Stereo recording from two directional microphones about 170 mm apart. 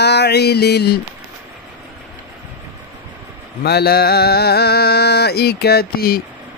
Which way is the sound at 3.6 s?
70° left (ahead or behind).